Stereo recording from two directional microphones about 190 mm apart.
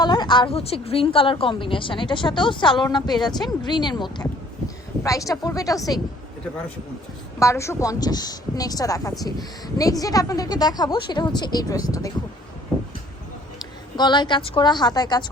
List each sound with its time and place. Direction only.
0.0 s a woman's voice: 25° left (ahead or behind)
7.3 s a woman's voice: 15° left (ahead or behind)
13.6 s a woman's voice: 20° left (ahead or behind)